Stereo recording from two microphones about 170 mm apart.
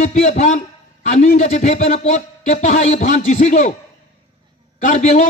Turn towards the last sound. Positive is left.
turn(degrees=45)  # may be behind; listen again after turning